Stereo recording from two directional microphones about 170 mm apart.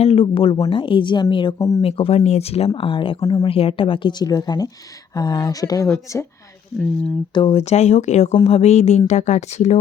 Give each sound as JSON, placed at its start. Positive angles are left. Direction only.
{"t": 0.0, "sound": "a woman's voice", "side_deg": 35}
{"t": 1.8, "sound": "a woman's voice", "side_deg": 35}
{"t": 7.3, "sound": "speech", "side_deg": 35}